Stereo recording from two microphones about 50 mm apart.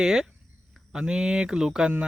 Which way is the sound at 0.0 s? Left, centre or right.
Centre.